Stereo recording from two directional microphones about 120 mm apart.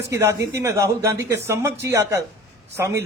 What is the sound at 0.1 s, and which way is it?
A man's voice, 25° right (ahead or behind).